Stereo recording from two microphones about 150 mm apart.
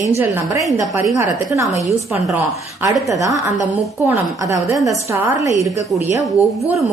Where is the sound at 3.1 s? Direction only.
20° right (ahead or behind).